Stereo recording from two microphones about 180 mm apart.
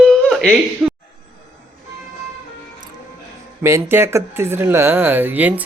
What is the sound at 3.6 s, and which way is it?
Speech, 15° right (ahead or behind).